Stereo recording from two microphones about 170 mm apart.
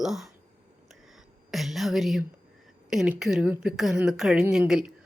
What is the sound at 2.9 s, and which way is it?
A woman's voice, 5° right (ahead or behind).